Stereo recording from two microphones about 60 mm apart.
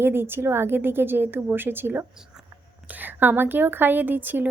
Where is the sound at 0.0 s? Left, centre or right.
Right.